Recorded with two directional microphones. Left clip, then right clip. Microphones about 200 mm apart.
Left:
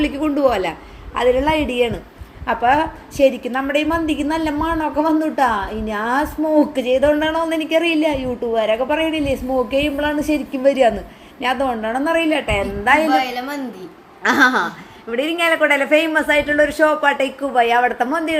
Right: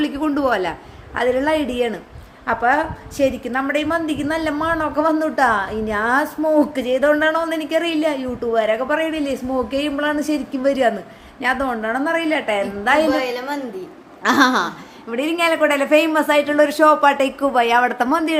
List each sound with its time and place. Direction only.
0.0 s a woman's voice: centre (ahead or behind)
13.1 s a woman's voice: 30° right (ahead or behind)
14.2 s speech: 5° left (ahead or behind)